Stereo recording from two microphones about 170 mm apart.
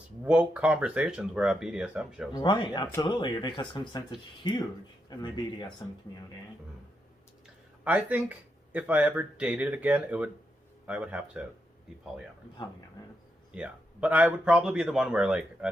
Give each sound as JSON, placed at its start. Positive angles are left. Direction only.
{"t": 0.3, "sound": "speech", "side_deg": -5}
{"t": 2.3, "sound": "speech", "side_deg": 25}
{"t": 7.4, "sound": "a man's voice", "side_deg": -10}
{"t": 13.5, "sound": "a man's voice", "side_deg": -5}